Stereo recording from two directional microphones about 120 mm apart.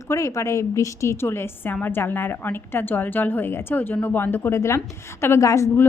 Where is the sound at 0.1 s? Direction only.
25° left (ahead or behind).